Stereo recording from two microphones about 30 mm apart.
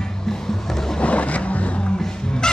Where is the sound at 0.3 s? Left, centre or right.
Centre.